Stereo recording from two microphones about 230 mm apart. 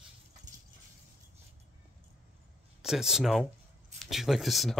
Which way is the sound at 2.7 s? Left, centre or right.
Centre.